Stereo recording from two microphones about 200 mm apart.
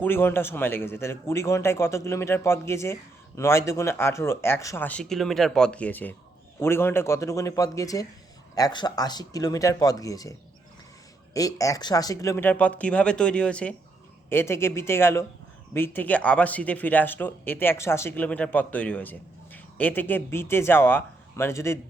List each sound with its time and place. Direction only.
0.0 s a man's voice: 10° left (ahead or behind)
11.3 s a man's voice: 15° left (ahead or behind)